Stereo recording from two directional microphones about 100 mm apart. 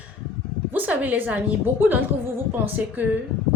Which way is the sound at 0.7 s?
15° right (ahead or behind).